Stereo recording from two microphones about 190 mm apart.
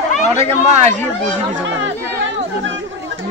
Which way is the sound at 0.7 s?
35° right (ahead or behind).